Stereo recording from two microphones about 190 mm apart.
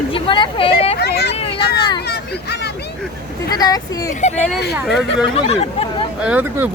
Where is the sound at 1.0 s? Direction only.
60° left (ahead or behind).